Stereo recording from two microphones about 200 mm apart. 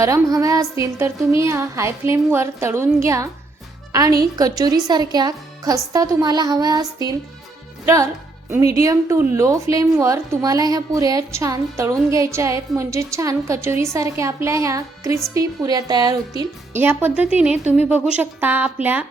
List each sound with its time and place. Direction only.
0.0 s a woman's voice: 15° right (ahead or behind)